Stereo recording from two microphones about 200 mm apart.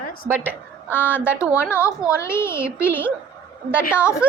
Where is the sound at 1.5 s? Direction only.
15° left (ahead or behind).